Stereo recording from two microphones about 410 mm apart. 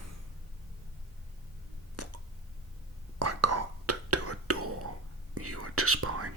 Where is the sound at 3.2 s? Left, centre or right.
Right.